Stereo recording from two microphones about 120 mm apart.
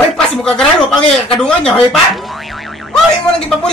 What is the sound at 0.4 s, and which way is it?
Speech, 5° left (ahead or behind).